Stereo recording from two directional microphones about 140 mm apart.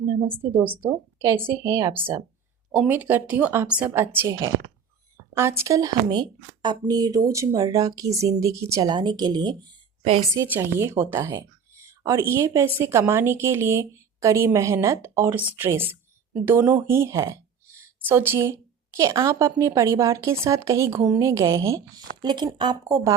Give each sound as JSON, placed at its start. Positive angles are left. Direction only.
{"t": 0.0, "sound": "a woman's voice", "side_deg": -20}
{"t": 0.6, "sound": "a woman's voice", "side_deg": -10}
{"t": 8.9, "sound": "a woman's voice", "side_deg": -35}
{"t": 10.3, "sound": "a woman's voice", "side_deg": -15}